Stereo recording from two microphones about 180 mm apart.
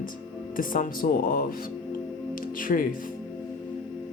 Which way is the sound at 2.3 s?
50° left (ahead or behind).